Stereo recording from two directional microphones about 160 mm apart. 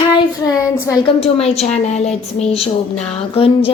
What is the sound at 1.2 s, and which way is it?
A woman's voice, 40° left (ahead or behind).